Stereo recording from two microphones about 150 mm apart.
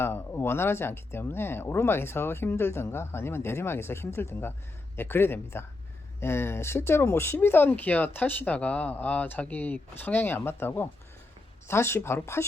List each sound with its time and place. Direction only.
0.0 s speech: 15° left (ahead or behind)